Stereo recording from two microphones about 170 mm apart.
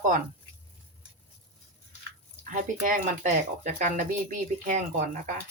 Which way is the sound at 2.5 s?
50° right (ahead or behind).